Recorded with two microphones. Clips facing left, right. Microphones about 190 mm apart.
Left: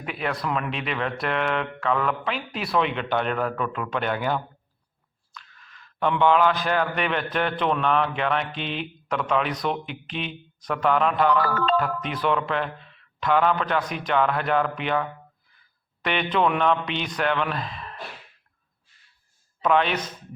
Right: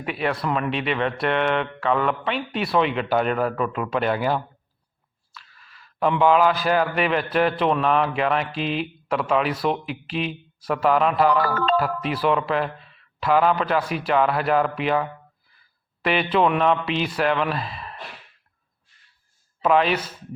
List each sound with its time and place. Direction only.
0.0 s a man's voice: centre (ahead or behind)
11.3 s music: 45° right (ahead or behind)
11.8 s a man's voice: 5° right (ahead or behind)
16.0 s a man's voice: 5° right (ahead or behind)
19.6 s speech: 5° right (ahead or behind)